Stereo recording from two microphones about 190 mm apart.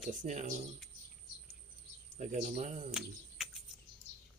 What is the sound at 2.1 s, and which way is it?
Speech, 40° right (ahead or behind).